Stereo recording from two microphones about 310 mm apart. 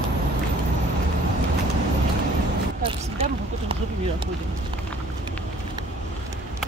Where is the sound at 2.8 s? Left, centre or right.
Centre.